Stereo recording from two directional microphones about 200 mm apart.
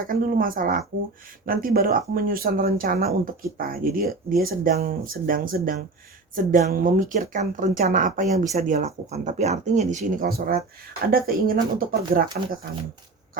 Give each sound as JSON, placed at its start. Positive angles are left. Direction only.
{"t": 0.1, "sound": "speech", "side_deg": -45}